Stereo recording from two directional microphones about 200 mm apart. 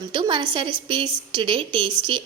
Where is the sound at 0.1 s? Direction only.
25° right (ahead or behind).